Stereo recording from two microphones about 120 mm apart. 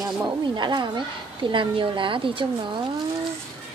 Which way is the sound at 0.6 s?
40° right (ahead or behind).